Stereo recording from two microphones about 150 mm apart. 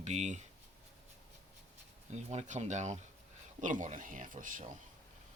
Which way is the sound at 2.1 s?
50° right (ahead or behind).